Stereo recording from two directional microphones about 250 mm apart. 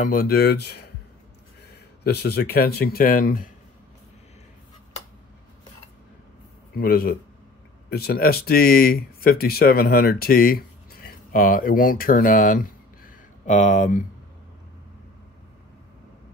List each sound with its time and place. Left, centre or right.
0.0 s speech: left
2.0 s speech: left
6.7 s speech: left